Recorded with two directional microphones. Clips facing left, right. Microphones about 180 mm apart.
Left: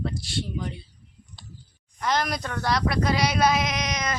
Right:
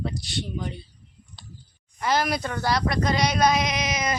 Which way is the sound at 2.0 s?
5° right (ahead or behind).